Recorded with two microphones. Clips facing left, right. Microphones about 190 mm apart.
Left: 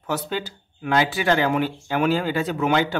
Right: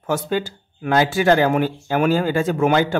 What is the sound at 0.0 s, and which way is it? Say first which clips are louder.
Speech: right 5 dB; 50° right (ahead or behind).